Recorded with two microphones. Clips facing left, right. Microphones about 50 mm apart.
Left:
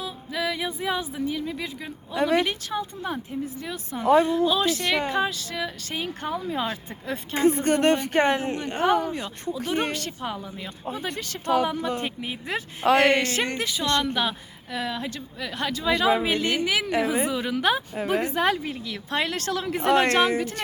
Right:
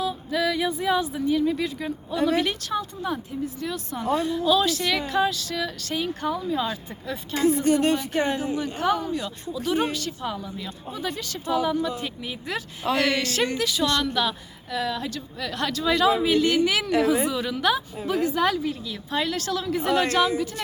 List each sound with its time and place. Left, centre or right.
0.0 s speech: centre
2.1 s a woman's voice: left
2.4 s speech: centre
3.0 s a woman's voice: left
4.0 s speech: left
4.8 s a woman's voice: left
5.0 s speech: left
9.1 s a woman's voice: left
11.4 s a woman's voice: left
13.6 s a woman's voice: left
16.1 s speech: left
16.6 s a woman's voice: centre
17.9 s a woman's voice: left